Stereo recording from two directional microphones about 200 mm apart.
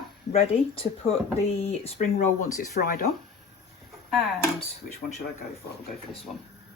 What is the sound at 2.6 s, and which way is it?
Speech, 45° left (ahead or behind).